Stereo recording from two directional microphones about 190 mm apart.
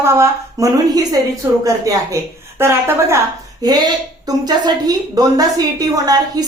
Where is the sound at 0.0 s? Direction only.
15° right (ahead or behind).